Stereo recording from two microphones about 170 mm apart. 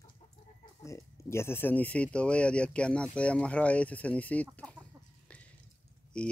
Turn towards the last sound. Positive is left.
turn(degrees=5)  # may be behind; listen again after turning